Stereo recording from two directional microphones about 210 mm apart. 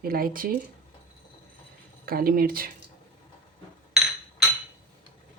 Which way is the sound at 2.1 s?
45° right (ahead or behind).